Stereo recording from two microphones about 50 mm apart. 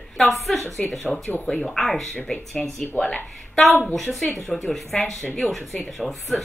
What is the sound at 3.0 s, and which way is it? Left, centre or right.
Speech, left.